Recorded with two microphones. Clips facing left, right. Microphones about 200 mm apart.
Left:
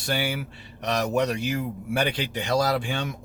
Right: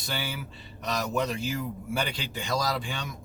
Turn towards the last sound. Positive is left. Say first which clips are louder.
# left 6 dB
turn(degrees=65)  # may be behind; listen again after turning